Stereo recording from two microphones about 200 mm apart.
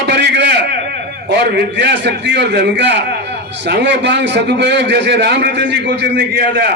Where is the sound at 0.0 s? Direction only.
55° right (ahead or behind).